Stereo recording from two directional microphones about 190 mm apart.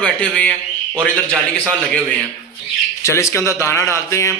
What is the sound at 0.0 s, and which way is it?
A man's voice, 5° left (ahead or behind).